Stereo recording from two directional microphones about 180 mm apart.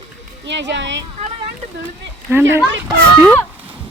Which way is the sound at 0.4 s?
80° right.